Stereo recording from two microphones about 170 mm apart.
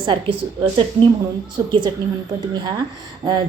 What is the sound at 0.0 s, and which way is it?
Speech, 30° right (ahead or behind).